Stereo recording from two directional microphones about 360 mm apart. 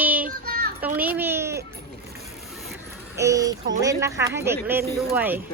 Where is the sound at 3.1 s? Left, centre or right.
Centre.